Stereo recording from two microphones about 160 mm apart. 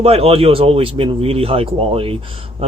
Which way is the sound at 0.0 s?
40° right (ahead or behind).